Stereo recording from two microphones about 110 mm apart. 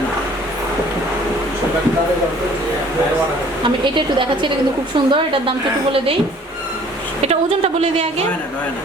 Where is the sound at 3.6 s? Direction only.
50° right (ahead or behind).